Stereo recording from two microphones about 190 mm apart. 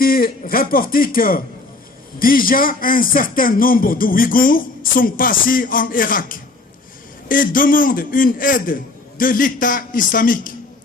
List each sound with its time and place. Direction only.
0.0 s speech: 50° left (ahead or behind)